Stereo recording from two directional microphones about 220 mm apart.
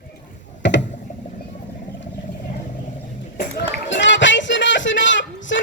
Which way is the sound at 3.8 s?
55° left (ahead or behind).